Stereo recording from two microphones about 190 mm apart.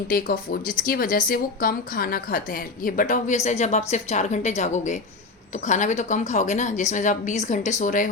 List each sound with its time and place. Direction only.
0.1 s a woman's voice: 50° left (ahead or behind)